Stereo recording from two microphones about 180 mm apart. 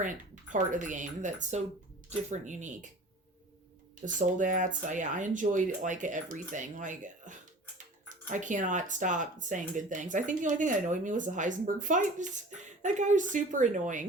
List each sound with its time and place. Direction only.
0.5 s speech: 45° right (ahead or behind)
4.0 s speech: 45° right (ahead or behind)